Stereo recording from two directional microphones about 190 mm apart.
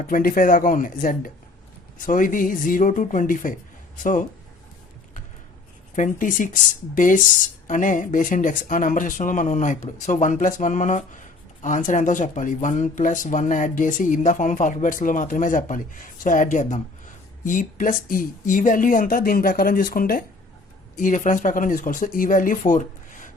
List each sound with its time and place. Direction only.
0.0 s speech: 45° left (ahead or behind)
6.0 s speech: 45° left (ahead or behind)